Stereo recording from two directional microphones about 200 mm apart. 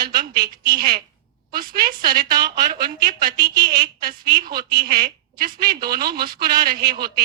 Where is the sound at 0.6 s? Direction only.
50° right (ahead or behind).